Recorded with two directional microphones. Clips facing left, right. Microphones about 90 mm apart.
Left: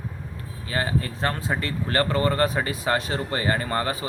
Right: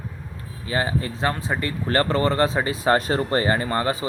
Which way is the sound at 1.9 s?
30° right (ahead or behind).